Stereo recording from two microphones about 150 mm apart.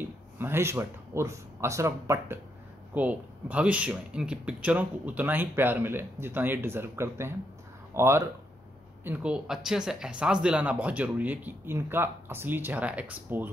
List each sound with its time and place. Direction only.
0.0 s speech: 15° right (ahead or behind)